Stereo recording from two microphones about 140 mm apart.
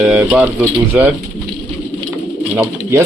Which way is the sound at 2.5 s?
20° right (ahead or behind).